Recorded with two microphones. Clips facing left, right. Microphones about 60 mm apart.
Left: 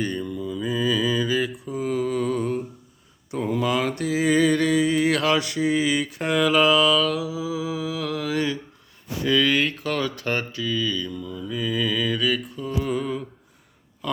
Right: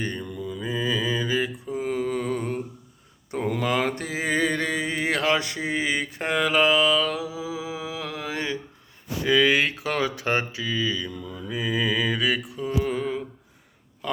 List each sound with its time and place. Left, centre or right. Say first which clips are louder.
0.0 s mantra: left 3 dB; right
9.2 s speech: right 1 dB; centre
11.1 s mantra: left 3 dB; right
11.5 s mantra: even; centre
14.0 s a sound: left 1 dB; right